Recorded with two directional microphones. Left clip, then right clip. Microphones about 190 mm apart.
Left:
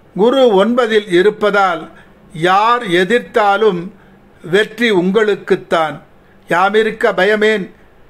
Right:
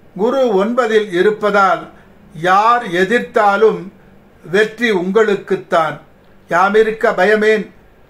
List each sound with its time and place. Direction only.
0.2 s a man's voice: 50° left (ahead or behind)